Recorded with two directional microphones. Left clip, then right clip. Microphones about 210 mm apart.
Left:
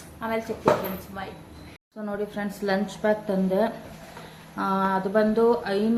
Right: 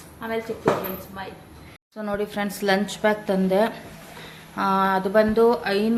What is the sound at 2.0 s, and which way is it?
Speech, 15° right (ahead or behind).